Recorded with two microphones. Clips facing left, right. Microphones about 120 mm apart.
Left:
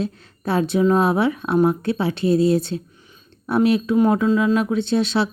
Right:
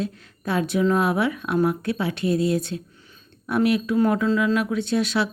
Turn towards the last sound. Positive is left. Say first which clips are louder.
# left 3 dB
turn(degrees=30)  # may be behind; listen again after turning